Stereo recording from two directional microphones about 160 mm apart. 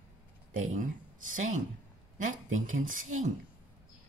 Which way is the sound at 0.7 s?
50° right (ahead or behind).